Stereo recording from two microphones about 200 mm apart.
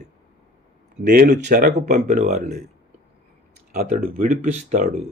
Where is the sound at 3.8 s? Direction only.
45° right (ahead or behind).